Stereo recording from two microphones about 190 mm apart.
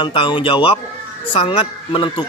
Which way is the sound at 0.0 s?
25° left (ahead or behind).